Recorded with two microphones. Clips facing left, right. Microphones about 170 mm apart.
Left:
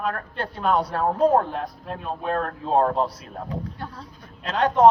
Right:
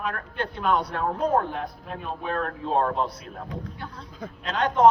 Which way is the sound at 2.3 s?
35° left (ahead or behind).